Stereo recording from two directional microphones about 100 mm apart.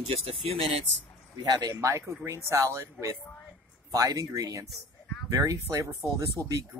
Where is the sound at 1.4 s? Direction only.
45° right (ahead or behind).